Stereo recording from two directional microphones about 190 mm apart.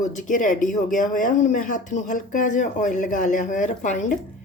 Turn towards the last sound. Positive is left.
turn(degrees=40)  # may be behind; listen again after turning